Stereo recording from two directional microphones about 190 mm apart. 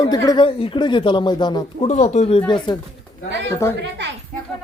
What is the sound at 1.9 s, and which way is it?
Speech, 40° left (ahead or behind).